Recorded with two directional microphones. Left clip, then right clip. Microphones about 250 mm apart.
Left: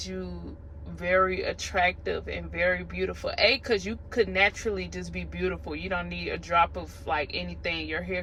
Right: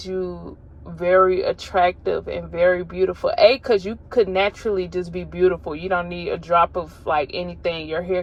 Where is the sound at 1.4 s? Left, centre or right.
Right.